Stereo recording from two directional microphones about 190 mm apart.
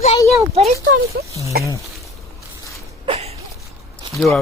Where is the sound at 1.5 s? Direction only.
50° right (ahead or behind).